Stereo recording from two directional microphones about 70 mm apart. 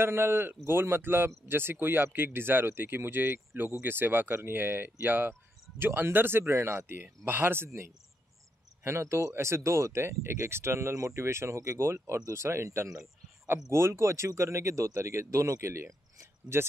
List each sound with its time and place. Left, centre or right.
0.0 s speech: right
7.0 s speech: right